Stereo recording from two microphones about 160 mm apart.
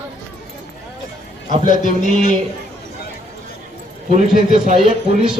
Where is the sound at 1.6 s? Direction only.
55° left (ahead or behind).